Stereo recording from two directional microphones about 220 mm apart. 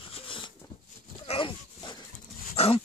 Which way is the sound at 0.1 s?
25° left (ahead or behind).